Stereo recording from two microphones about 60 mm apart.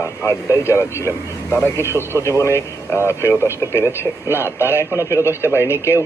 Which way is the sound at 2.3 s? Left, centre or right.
Left.